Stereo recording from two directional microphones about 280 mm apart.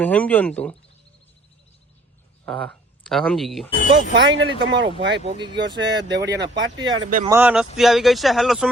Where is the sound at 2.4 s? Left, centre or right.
Centre.